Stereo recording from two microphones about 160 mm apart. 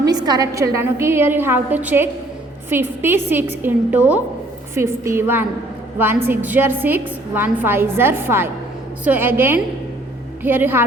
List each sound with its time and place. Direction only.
0.0 s a woman's voice: 25° right (ahead or behind)